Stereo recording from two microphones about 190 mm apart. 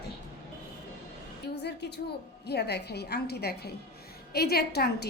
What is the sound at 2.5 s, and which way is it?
A woman's voice, 60° left (ahead or behind).